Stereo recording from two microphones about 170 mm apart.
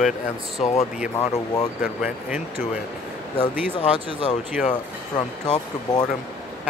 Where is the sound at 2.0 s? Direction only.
10° right (ahead or behind).